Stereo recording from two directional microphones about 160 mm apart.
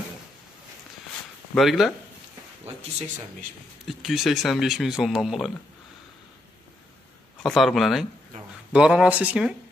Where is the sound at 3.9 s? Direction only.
Centre (ahead or behind).